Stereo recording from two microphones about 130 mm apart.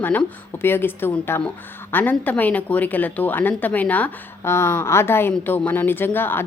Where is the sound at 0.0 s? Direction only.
15° left (ahead or behind).